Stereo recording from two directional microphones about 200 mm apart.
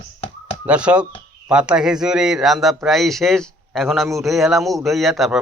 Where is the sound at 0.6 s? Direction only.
5° right (ahead or behind).